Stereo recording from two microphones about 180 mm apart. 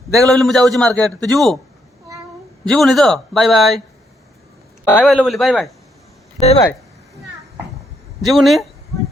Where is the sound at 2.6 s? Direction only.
Centre (ahead or behind).